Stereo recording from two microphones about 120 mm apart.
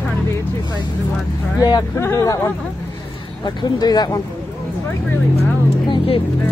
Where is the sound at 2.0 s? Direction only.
25° left (ahead or behind).